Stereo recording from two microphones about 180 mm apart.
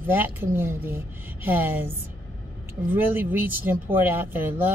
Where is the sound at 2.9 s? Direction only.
10° right (ahead or behind).